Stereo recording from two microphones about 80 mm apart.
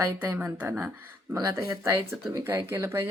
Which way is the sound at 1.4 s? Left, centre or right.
Right.